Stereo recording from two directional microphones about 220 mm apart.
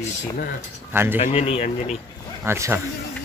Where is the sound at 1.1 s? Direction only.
30° left (ahead or behind).